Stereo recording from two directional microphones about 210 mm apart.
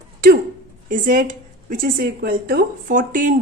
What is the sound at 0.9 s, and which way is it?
A woman's voice, 40° right (ahead or behind).